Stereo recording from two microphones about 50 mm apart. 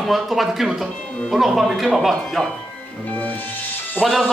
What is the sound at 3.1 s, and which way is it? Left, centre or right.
Music, left.